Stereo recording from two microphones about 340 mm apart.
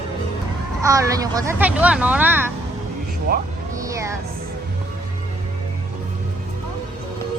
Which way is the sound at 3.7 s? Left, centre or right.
Centre.